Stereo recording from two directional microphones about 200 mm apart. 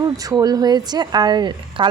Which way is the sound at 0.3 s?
20° right (ahead or behind).